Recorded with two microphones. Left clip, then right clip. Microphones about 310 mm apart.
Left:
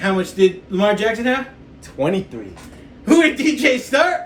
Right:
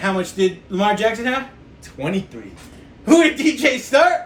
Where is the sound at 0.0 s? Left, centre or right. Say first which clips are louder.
Left 3 dB; centre.